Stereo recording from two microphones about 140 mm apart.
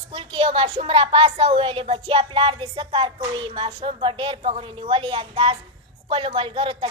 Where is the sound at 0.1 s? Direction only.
40° right (ahead or behind).